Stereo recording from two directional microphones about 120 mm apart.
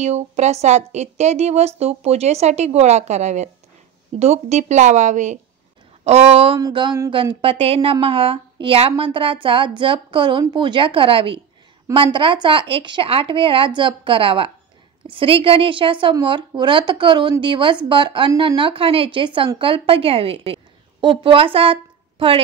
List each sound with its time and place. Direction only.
0.0 s speech: 65° right (ahead or behind); by 5.4 s 90° right
6.0 s speech: 60° right (ahead or behind)
6.7 s a sound: 40° right (ahead or behind)
7.1 s a woman's voice: 50° right (ahead or behind)